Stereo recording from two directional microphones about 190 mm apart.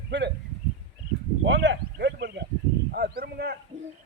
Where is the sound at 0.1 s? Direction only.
65° right (ahead or behind).